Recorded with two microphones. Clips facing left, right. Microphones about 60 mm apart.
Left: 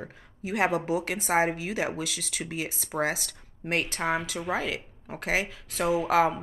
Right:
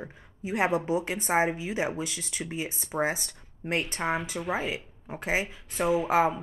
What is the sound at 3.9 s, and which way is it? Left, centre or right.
Speech, left.